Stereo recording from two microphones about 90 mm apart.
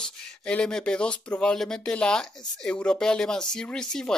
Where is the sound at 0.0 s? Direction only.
10° left (ahead or behind).